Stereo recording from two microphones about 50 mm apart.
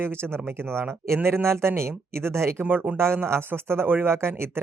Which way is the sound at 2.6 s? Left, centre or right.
Right.